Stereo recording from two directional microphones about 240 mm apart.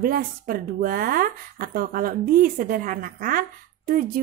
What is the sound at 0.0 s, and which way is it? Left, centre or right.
Speech, right.